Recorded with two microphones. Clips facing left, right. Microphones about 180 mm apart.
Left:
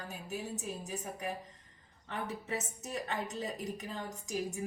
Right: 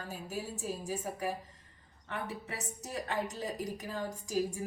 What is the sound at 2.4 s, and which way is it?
A woman's voice, 20° left (ahead or behind).